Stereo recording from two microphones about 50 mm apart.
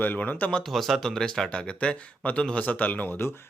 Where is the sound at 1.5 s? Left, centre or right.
Left.